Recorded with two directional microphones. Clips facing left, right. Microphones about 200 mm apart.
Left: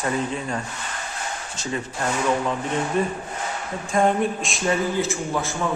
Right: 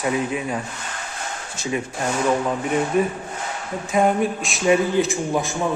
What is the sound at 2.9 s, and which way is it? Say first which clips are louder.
Speech: right 3 dB; 10° right (ahead or behind).